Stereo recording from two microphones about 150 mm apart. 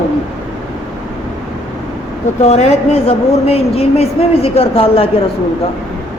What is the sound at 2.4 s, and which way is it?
A woman's voice, 45° left (ahead or behind).